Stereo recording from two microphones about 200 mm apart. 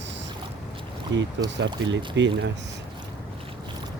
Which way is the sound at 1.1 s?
65° right (ahead or behind).